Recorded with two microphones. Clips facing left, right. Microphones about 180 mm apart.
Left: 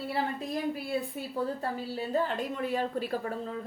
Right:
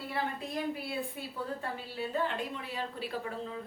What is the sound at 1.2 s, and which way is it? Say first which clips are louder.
A woman's voice: left 5 dB; 40° left (ahead or behind).